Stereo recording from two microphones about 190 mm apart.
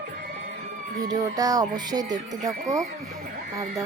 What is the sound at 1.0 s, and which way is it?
Music, 20° right (ahead or behind).